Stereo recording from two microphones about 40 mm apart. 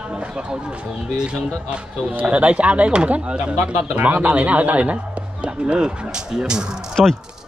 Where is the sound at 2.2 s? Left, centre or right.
Right.